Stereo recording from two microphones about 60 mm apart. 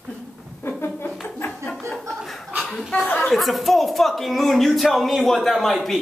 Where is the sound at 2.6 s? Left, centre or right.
Centre.